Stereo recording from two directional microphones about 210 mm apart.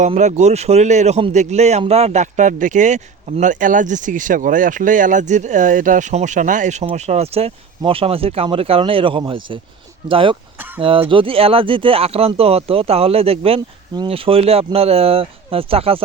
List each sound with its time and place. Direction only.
0.0 s a man's voice: 35° right (ahead or behind)